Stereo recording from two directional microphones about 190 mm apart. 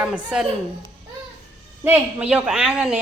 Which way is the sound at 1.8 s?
10° right (ahead or behind).